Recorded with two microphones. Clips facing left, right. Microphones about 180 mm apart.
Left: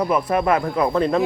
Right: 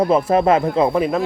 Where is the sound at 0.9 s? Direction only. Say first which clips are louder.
Right 1 dB; 5° right (ahead or behind).